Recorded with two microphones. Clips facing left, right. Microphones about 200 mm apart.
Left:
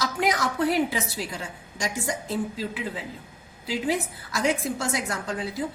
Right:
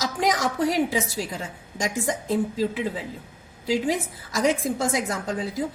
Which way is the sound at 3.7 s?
45° right (ahead or behind).